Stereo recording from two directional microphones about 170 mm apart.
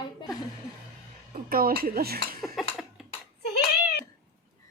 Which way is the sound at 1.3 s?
60° right (ahead or behind).